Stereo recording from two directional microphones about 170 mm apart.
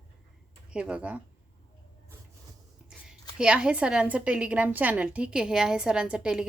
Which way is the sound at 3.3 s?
5° right (ahead or behind).